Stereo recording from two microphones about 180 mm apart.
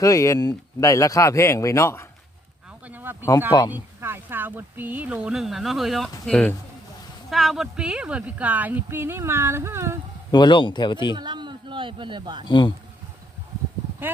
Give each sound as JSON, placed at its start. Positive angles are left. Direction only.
{"t": 0.0, "sound": "speech", "side_deg": 20}
{"t": 2.8, "sound": "speech", "side_deg": -10}
{"t": 10.3, "sound": "speech", "side_deg": 25}
{"t": 11.2, "sound": "a woman's voice", "side_deg": -25}
{"t": 12.5, "sound": "speech", "side_deg": 25}